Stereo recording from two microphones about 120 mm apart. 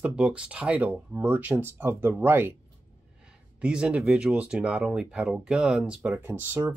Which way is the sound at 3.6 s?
10° right (ahead or behind).